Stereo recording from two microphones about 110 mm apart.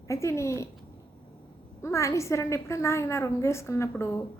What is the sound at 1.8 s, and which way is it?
A woman's voice, 25° left (ahead or behind).